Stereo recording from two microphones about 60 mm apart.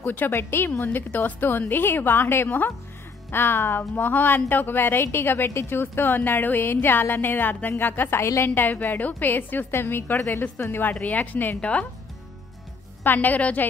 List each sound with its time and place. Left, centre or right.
0.0 s speech: left
13.0 s a woman's voice: left